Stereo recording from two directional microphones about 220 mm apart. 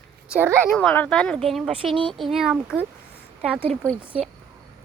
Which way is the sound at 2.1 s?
Centre (ahead or behind).